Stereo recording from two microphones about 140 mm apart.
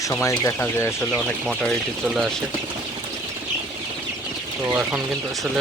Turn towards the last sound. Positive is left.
turn(degrees=-10)  # may be behind; listen again after turning